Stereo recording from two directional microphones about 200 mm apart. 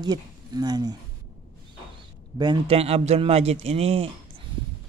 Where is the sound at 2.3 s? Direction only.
20° right (ahead or behind).